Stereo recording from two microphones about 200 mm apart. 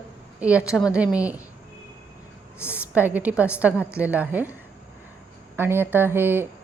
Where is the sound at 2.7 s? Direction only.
5° right (ahead or behind).